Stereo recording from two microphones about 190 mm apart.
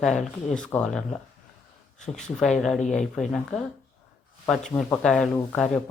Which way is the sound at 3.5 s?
35° left (ahead or behind).